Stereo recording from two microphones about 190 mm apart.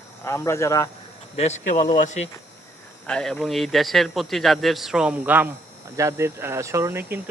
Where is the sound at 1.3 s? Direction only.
35° left (ahead or behind).